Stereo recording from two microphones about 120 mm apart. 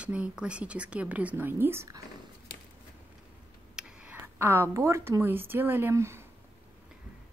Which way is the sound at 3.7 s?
10° right (ahead or behind).